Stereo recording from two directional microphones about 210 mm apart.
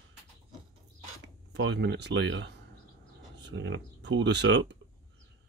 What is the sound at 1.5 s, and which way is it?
Speech, 55° right (ahead or behind).